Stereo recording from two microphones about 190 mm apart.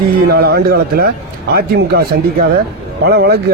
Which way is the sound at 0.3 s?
55° right (ahead or behind).